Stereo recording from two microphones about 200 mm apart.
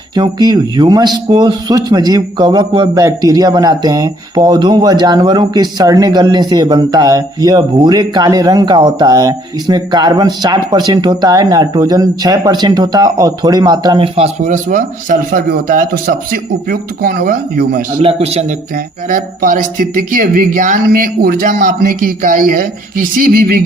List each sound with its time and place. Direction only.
0.1 s speech: 20° right (ahead or behind); by 17.8 s 45° right (ahead or behind)
18.0 s a man's voice: 30° right (ahead or behind)
19.0 s speech: 40° right (ahead or behind)